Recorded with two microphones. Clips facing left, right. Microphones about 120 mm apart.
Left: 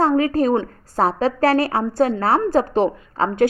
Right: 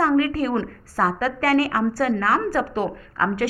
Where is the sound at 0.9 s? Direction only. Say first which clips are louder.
Left 4 dB; 25° left (ahead or behind).